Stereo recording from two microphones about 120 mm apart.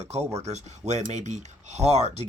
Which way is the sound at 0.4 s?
70° right (ahead or behind).